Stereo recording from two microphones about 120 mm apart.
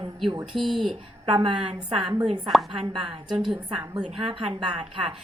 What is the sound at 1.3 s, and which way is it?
A woman's voice, 45° right (ahead or behind).